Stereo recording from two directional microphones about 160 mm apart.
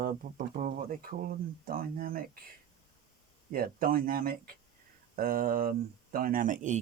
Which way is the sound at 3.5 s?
65° right (ahead or behind).